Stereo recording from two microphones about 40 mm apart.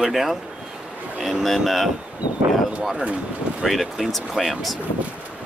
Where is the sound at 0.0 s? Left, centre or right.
Centre.